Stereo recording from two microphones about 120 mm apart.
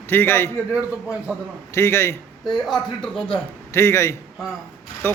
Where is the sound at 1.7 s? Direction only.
20° left (ahead or behind).